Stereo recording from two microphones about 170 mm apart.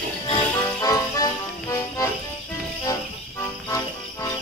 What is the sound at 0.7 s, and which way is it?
Music, 20° left (ahead or behind).